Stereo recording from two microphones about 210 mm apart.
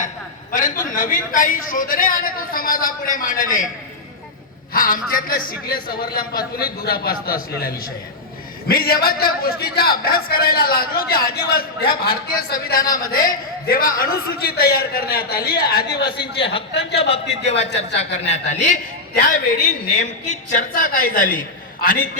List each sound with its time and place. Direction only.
0.5 s a man's voice: 40° left (ahead or behind)
4.7 s a man's voice: 45° left (ahead or behind)
15.9 s a man's voice: 20° left (ahead or behind); by 22.2 s 40° left (ahead or behind)